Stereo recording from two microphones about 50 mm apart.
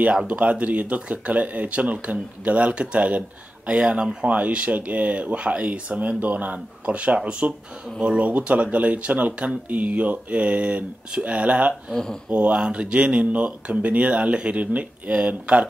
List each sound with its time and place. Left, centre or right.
0.3 s speech: right
4.3 s speech: right
7.2 s speech: centre
8.3 s speech: right